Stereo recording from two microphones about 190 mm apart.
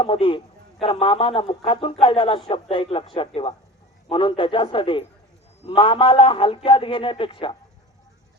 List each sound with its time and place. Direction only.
0.0 s a man's voice: 25° left (ahead or behind)